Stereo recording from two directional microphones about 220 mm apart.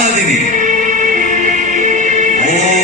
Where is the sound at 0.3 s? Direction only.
35° right (ahead or behind).